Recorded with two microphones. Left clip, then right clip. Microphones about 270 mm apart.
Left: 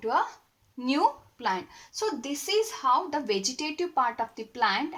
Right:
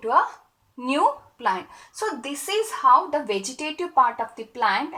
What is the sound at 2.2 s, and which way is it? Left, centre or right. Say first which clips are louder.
Speech: even; centre.